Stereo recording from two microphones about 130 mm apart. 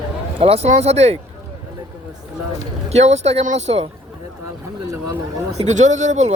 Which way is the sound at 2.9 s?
55° right (ahead or behind).